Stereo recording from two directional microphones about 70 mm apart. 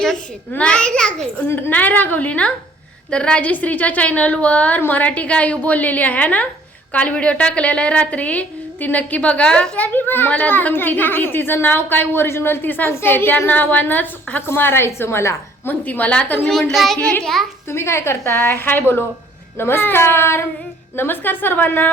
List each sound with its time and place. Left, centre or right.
0.5 s a woman's voice: centre
1.5 s a woman's voice: left
15.6 s a woman's voice: left; by 17.0 s centre
17.0 s a woman's voice: centre
17.7 s a woman's voice: left
18.3 s a woman's voice: left